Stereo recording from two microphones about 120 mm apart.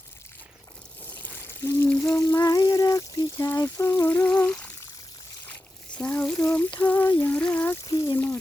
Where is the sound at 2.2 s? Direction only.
25° left (ahead or behind).